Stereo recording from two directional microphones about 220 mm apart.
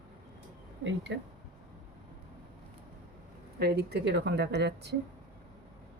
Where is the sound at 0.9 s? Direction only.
55° right (ahead or behind).